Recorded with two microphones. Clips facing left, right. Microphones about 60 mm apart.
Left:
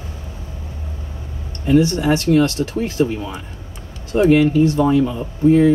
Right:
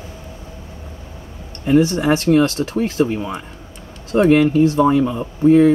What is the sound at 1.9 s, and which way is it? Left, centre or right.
Speech, right.